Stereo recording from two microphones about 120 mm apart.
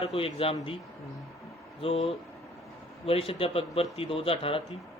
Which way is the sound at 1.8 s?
55° left (ahead or behind).